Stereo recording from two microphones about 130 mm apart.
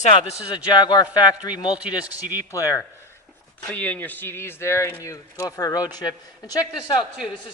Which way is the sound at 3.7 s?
10° left (ahead or behind).